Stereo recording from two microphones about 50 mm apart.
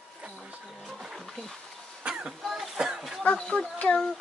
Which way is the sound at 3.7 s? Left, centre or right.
Left.